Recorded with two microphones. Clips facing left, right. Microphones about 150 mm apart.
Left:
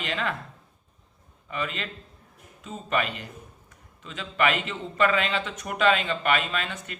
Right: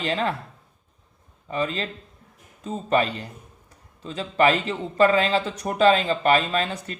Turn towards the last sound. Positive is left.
turn(degrees=-35)  # may be behind; listen again after turning